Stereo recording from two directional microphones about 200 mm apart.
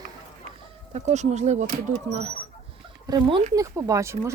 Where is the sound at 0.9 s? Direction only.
35° right (ahead or behind).